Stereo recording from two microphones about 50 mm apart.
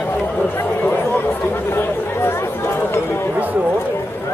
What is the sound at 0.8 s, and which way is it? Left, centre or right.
Chatter, left.